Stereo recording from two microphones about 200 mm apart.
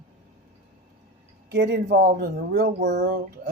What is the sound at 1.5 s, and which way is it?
Speech, 55° right (ahead or behind).